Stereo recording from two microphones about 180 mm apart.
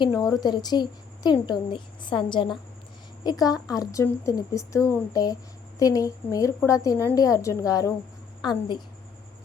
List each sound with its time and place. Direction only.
0.0 s a woman's voice: 20° left (ahead or behind)